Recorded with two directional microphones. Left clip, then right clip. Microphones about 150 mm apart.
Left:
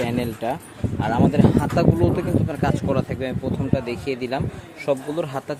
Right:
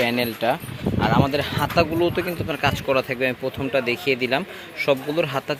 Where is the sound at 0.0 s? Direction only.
5° left (ahead or behind).